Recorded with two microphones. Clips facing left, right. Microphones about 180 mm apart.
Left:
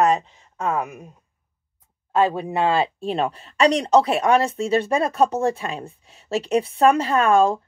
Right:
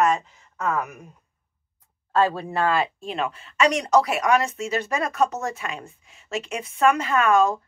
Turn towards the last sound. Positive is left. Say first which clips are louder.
# left 2 dB
turn(degrees=30)  # may be behind; listen again after turning